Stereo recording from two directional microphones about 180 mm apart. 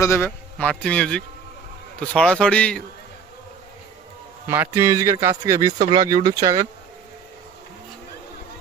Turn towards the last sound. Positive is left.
turn(degrees=-20)  # may be behind; listen again after turning